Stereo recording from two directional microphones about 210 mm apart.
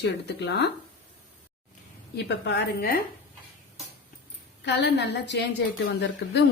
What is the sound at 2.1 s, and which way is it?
Speech, 55° left (ahead or behind).